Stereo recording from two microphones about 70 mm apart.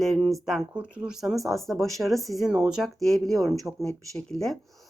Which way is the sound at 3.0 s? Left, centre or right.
Centre.